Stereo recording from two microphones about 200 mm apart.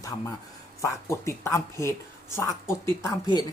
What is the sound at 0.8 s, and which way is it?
Speech, 15° left (ahead or behind).